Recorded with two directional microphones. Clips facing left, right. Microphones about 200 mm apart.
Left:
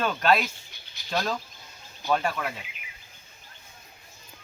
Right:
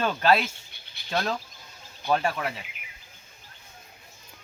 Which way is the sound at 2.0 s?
5° right (ahead or behind).